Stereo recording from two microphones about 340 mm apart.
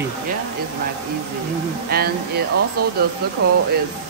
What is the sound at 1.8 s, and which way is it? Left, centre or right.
Speech, right.